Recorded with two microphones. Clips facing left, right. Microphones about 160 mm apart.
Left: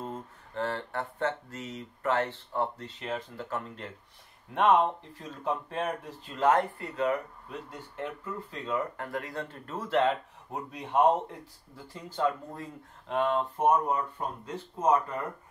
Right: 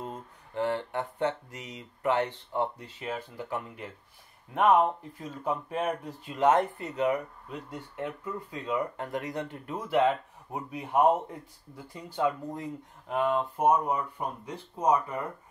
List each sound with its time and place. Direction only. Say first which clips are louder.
0.0 s speech: left 1 dB; 15° right (ahead or behind)
8.5 s speech: right 1 dB; 15° right (ahead or behind)